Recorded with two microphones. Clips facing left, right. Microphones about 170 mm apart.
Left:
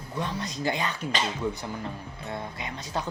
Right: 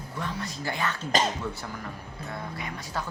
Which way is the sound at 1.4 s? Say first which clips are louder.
Left 4 dB; 15° left (ahead or behind).